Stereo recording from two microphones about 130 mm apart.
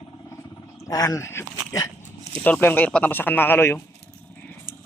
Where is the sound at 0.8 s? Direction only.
30° left (ahead or behind).